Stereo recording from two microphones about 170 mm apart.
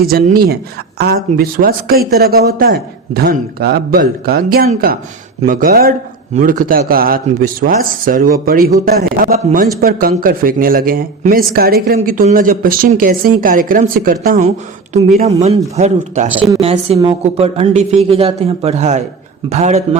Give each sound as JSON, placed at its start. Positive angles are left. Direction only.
{"t": 0.1, "sound": "speech", "side_deg": -60}
{"t": 11.9, "sound": "speech", "side_deg": -45}
{"t": 15.7, "sound": "a woman's voice", "side_deg": -45}